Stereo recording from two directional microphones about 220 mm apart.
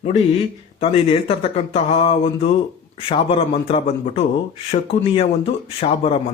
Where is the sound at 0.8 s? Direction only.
25° left (ahead or behind).